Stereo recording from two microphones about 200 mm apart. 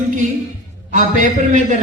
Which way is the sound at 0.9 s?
35° right (ahead or behind).